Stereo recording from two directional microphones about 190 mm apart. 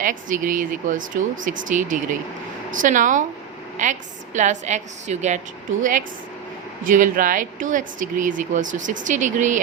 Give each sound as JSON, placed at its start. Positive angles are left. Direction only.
{"t": 0.0, "sound": "a woman's voice", "side_deg": -45}